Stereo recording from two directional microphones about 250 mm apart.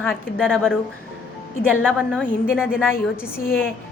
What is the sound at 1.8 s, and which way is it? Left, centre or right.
A woman's voice, centre.